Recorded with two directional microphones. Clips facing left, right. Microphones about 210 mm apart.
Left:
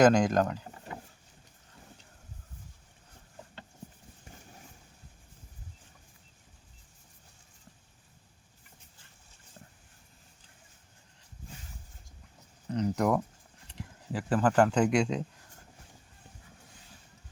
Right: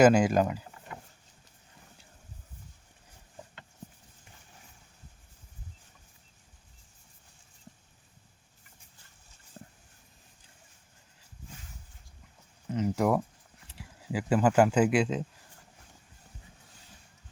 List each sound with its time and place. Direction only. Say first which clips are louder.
0.0 s speech: right 1 dB; 10° right (ahead or behind)
9.6 s a sound: right 5 dB; 30° right (ahead or behind)
12.7 s speech: right 1 dB; 5° right (ahead or behind)